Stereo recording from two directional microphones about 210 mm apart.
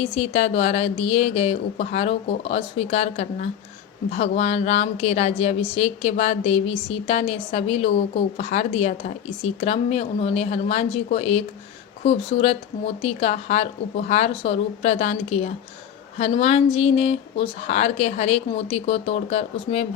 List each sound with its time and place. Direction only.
0.2 s a woman's voice: 30° left (ahead or behind)